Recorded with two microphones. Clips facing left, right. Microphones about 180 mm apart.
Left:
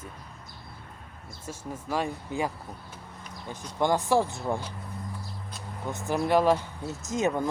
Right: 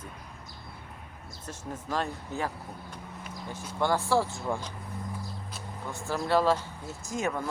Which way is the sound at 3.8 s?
15° left (ahead or behind).